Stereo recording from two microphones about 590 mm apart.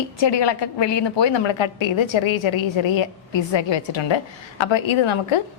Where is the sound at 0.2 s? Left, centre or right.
Left.